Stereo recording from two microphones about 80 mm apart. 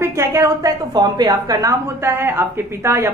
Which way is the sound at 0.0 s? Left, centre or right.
Right.